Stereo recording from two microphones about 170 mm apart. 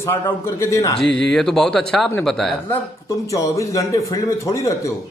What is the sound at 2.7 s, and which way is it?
A man's voice, 20° left (ahead or behind).